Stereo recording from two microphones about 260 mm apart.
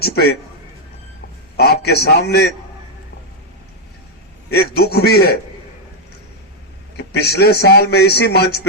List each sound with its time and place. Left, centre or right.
0.0 s a man's voice: left
1.5 s a man's voice: left
4.5 s a man's voice: left
6.9 s a man's voice: left